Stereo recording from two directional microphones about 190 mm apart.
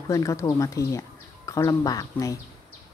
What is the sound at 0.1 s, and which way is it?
A man's voice, 15° left (ahead or behind).